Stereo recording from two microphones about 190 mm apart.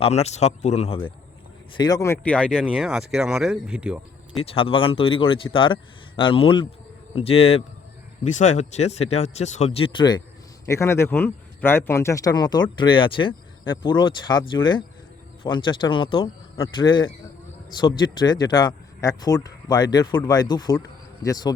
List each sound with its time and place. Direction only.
0.0 s speech: 35° left (ahead or behind); by 2.5 s 5° left (ahead or behind)
2.5 s speech: 5° right (ahead or behind)
4.4 s speech: 30° left (ahead or behind)